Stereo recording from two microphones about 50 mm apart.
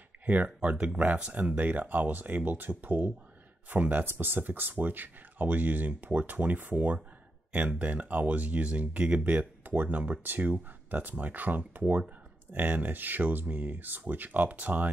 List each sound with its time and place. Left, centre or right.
0.3 s speech: right